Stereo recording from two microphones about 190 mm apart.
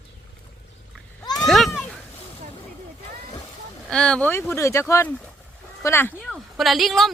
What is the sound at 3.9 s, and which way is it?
Speech, 5° left (ahead or behind).